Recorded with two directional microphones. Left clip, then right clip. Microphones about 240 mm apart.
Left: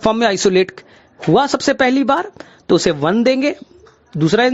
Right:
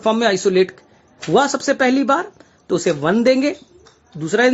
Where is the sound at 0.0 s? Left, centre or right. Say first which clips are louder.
Left 2 dB; left.